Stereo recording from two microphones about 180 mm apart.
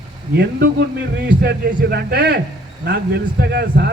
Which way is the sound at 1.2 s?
60° right (ahead or behind).